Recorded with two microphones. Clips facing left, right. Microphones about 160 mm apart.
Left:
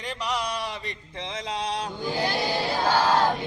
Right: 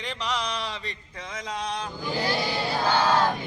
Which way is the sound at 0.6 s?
20° left (ahead or behind).